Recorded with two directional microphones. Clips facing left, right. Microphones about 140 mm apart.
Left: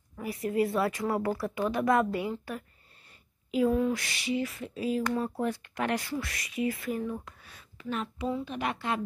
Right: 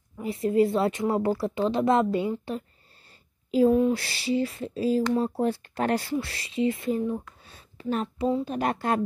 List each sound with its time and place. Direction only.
0.2 s speech: 25° right (ahead or behind)
3.1 s a sound: 30° right (ahead or behind)
3.7 s a woman's voice: 25° right (ahead or behind); by 9.0 s 45° right (ahead or behind)